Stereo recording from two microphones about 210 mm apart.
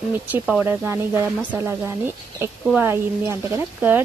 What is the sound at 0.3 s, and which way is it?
Speech, 5° right (ahead or behind).